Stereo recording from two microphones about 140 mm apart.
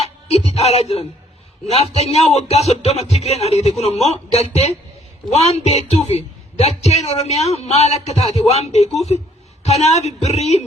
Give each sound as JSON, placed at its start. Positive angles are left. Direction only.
{"t": 0.0, "sound": "a woman's voice", "side_deg": 45}